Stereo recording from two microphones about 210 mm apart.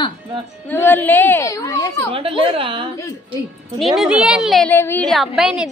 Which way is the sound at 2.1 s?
25° right (ahead or behind).